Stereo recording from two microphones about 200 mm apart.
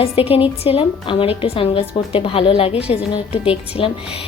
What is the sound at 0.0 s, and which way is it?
A woman's voice, 30° left (ahead or behind).